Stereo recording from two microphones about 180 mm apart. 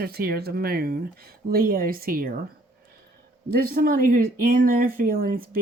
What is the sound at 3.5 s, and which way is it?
Speech, 55° right (ahead or behind).